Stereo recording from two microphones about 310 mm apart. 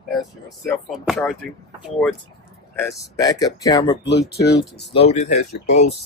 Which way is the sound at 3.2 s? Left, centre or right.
Centre.